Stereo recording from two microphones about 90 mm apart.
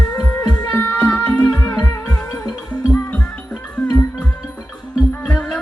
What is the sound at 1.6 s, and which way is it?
Music, 30° left (ahead or behind).